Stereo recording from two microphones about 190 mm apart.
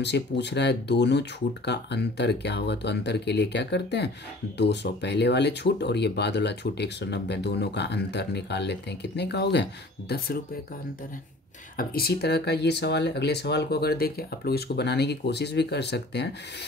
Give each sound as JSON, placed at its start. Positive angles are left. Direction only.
{"t": 0.0, "sound": "speech", "side_deg": 65}
{"t": 11.7, "sound": "speech", "side_deg": 50}